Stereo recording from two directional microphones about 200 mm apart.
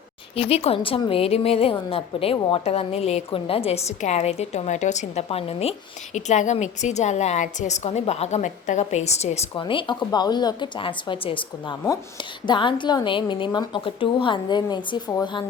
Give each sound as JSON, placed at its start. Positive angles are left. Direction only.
{"t": 0.3, "sound": "a woman's voice", "side_deg": 30}